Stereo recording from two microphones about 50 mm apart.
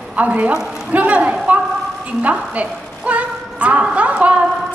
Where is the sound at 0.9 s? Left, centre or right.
Right.